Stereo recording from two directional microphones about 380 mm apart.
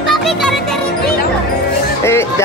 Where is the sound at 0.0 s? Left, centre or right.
Centre.